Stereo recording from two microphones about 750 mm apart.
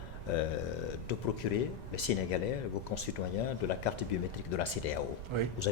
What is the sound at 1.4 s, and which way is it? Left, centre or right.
Speech, left.